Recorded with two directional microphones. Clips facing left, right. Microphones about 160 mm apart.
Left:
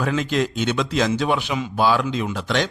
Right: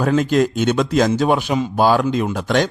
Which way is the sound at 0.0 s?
45° right (ahead or behind).